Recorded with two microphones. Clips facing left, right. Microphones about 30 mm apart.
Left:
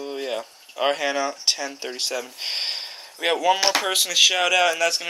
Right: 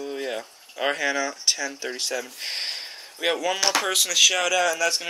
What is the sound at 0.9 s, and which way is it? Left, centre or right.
Speech, left.